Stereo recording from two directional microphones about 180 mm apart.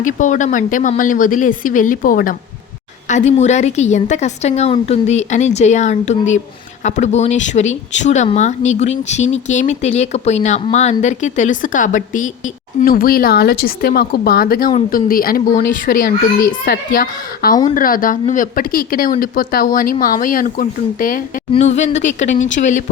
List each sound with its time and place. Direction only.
0.0 s speech: 45° left (ahead or behind)
3.1 s speech: 40° left (ahead or behind)
21.5 s speech: 40° left (ahead or behind)